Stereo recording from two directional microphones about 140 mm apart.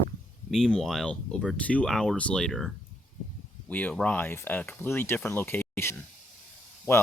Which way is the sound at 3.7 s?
10° left (ahead or behind).